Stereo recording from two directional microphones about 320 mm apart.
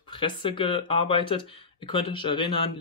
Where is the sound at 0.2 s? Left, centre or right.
Centre.